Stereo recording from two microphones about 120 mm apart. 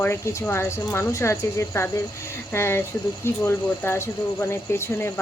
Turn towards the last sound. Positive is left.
turn(degrees=20)  # may be behind; listen again after turning